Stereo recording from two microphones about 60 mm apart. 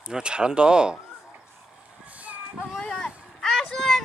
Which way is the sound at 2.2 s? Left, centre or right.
Right.